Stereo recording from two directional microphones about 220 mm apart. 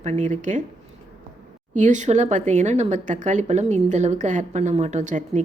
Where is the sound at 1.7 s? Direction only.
35° right (ahead or behind).